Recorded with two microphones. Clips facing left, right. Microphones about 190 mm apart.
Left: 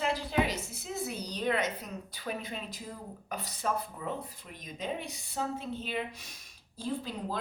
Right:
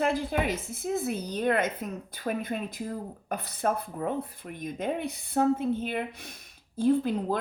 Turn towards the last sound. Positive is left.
turn(degrees=-55)  # may be behind; listen again after turning